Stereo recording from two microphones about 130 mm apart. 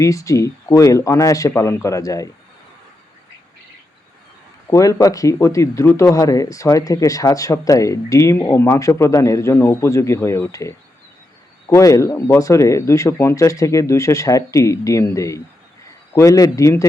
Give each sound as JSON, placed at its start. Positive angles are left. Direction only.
{"t": 0.0, "sound": "speech", "side_deg": 25}
{"t": 4.7, "sound": "speech", "side_deg": 25}